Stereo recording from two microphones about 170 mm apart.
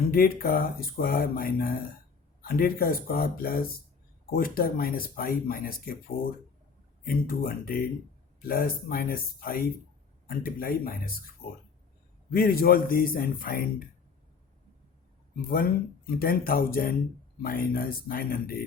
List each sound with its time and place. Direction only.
0.1 s speech: 60° left (ahead or behind)
7.0 s speech: 60° left (ahead or behind)
15.4 s speech: 60° left (ahead or behind)